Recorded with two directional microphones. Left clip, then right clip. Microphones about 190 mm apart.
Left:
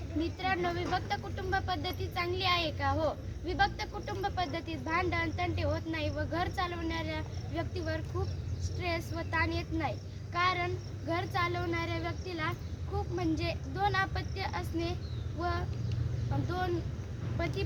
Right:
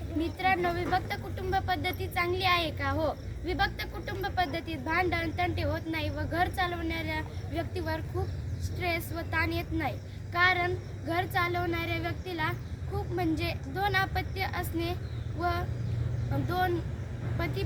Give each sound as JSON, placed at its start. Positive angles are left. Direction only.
{"t": 0.2, "sound": "speech", "side_deg": -10}
{"t": 15.4, "sound": "a sound", "side_deg": -20}
{"t": 17.4, "sound": "speech", "side_deg": -15}